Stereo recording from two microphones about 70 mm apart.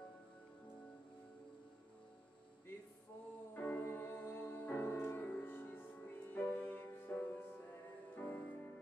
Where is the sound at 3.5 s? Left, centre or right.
Left.